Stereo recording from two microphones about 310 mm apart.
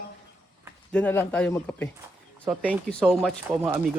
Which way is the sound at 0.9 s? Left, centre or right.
Centre.